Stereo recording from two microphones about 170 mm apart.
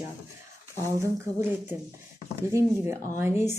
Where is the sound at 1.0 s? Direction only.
15° right (ahead or behind).